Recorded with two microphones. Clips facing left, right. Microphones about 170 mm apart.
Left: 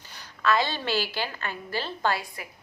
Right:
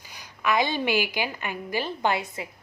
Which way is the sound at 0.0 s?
10° right (ahead or behind).